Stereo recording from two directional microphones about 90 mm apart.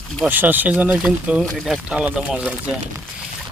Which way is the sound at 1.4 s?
Centre (ahead or behind).